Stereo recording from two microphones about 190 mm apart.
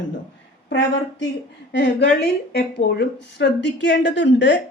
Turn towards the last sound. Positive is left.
turn(degrees=65)  # may be behind; listen again after turning